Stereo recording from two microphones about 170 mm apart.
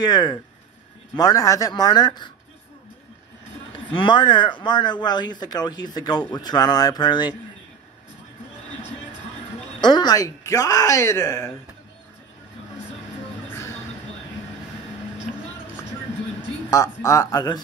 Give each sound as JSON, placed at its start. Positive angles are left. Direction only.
{"t": 0.0, "sound": "speech", "side_deg": 25}
{"t": 3.9, "sound": "speech", "side_deg": 30}
{"t": 9.8, "sound": "speech", "side_deg": 25}
{"t": 16.3, "sound": "speech", "side_deg": 15}